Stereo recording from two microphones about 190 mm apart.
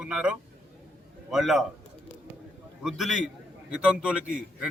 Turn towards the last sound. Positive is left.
turn(degrees=-5)  # may be behind; listen again after turning